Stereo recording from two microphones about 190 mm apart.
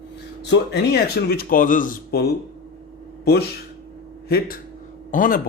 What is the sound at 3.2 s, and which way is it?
Speech, 55° left (ahead or behind).